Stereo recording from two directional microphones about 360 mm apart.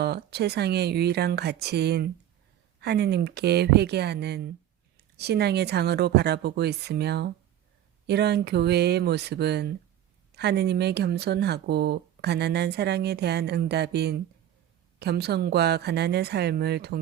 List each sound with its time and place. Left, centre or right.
0.0 s speech: right